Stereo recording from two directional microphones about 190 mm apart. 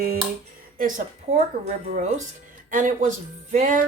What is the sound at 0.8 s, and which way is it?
A woman's voice, 45° right (ahead or behind).